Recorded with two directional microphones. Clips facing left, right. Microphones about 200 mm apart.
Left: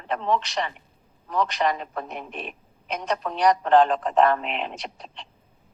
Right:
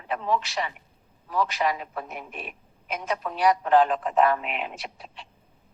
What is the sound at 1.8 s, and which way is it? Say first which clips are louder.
Speech: left 2 dB; 45° left (ahead or behind).